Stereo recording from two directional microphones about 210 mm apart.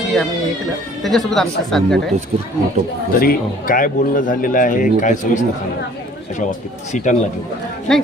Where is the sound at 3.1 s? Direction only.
45° left (ahead or behind).